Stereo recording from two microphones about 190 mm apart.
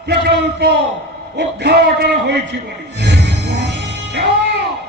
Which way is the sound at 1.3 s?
60° right (ahead or behind).